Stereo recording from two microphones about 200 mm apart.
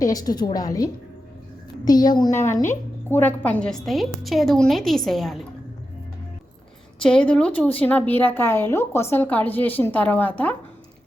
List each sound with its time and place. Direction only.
0.0 s a woman's voice: 20° left (ahead or behind); by 5.4 s centre (ahead or behind)
7.0 s a woman's voice: 5° left (ahead or behind)